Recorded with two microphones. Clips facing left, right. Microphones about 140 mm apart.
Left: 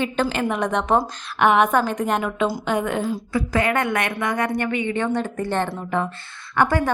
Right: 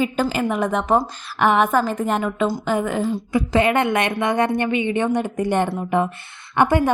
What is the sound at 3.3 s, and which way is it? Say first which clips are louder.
A woman's voice: right 4 dB; 20° right (ahead or behind).